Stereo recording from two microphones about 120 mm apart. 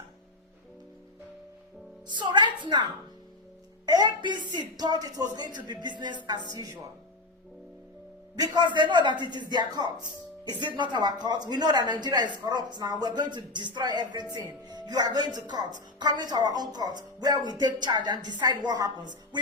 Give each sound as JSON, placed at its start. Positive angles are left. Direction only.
{"t": 2.0, "sound": "a woman's voice", "side_deg": -40}
{"t": 8.4, "sound": "speech", "side_deg": -40}